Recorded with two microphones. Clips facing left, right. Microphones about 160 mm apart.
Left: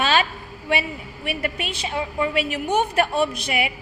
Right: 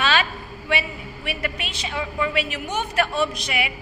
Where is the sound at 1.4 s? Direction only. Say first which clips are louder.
Left 3 dB; 45° left (ahead or behind).